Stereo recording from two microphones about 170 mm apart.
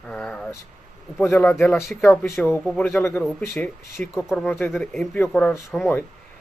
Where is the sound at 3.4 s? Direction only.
15° left (ahead or behind).